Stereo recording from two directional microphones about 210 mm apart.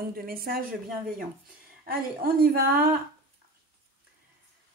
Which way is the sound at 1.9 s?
45° right (ahead or behind).